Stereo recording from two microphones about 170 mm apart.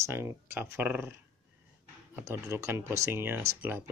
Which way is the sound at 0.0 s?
15° right (ahead or behind).